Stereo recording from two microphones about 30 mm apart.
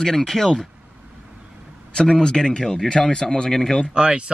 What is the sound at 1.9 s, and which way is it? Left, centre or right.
Speech, left.